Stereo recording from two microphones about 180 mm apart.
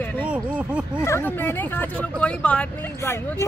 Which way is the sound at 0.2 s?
5° right (ahead or behind).